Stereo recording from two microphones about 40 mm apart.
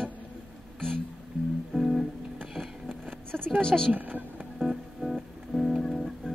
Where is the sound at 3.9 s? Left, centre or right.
Right.